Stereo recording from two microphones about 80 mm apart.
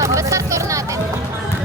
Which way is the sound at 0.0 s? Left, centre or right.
Right.